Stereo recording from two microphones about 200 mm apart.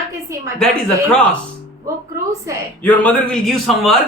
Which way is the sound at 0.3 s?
15° right (ahead or behind).